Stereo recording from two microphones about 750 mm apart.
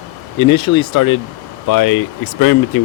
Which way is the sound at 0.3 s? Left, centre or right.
Left.